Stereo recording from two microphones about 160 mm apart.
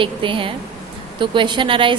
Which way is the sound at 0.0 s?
30° right (ahead or behind).